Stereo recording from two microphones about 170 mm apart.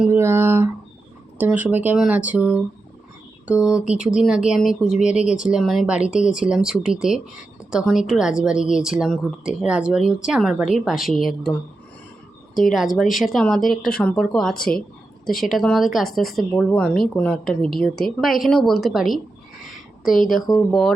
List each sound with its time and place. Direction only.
0.0 s a sound: 15° right (ahead or behind)
1.4 s speech: 10° right (ahead or behind)
5.0 s speech: 45° left (ahead or behind)
5.3 s speech: 5° right (ahead or behind)
13.0 s speech: centre (ahead or behind)
20.2 s speech: centre (ahead or behind)